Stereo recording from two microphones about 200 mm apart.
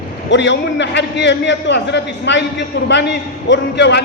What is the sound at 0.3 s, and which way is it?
A man's voice, 65° left (ahead or behind).